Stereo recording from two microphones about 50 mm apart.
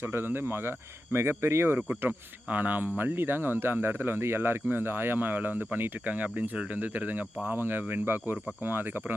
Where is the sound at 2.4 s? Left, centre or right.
Right.